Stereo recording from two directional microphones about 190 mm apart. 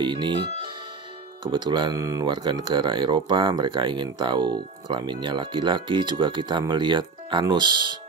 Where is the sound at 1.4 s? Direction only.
25° right (ahead or behind).